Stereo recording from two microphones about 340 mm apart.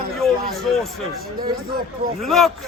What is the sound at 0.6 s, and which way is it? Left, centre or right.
Speech, centre.